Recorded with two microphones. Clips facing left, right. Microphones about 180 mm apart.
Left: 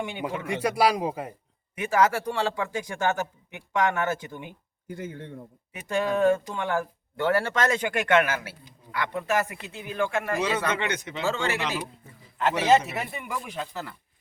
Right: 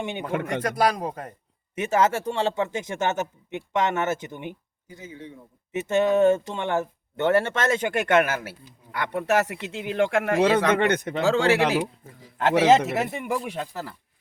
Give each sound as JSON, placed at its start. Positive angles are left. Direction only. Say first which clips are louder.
{"t": 0.0, "sound": "speech", "louder": "right 1 dB", "side_deg": -20}
{"t": 0.4, "sound": "speech", "louder": "left 1 dB", "side_deg": 10}
{"t": 1.7, "sound": "speech", "louder": "right 1 dB", "side_deg": -25}
{"t": 4.9, "sound": "speech", "louder": "left 4 dB", "side_deg": 55}
{"t": 5.7, "sound": "speech", "louder": "right 5 dB", "side_deg": -25}
{"t": 7.8, "sound": "speech", "louder": "right 2 dB", "side_deg": -45}
{"t": 9.0, "sound": "speech", "louder": "right 3 dB", "side_deg": -65}
{"t": 10.6, "sound": "speech", "louder": "right 7 dB", "side_deg": -55}
{"t": 11.3, "sound": "speech", "louder": "right 8 dB", "side_deg": -90}